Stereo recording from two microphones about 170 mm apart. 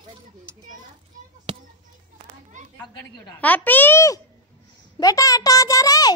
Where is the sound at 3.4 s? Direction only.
10° left (ahead or behind).